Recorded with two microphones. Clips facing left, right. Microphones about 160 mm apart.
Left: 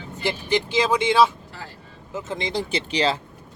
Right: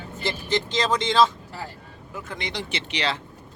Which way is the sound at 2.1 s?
25° left (ahead or behind).